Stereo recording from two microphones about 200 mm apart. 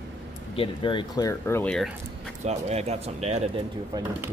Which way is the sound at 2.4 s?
35° right (ahead or behind).